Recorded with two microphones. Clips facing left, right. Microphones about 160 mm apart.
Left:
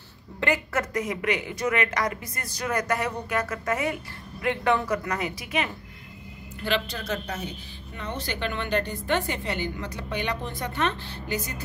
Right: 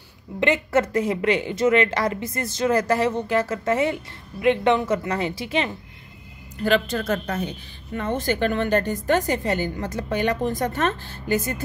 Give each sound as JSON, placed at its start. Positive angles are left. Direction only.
{"t": 0.4, "sound": "speech", "side_deg": -25}
{"t": 6.6, "sound": "a woman's voice", "side_deg": -45}